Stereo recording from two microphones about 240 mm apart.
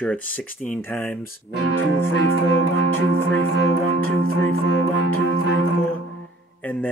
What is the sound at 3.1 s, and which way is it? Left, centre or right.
Music, right.